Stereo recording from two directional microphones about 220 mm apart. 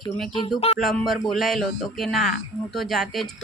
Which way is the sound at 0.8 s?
Centre (ahead or behind).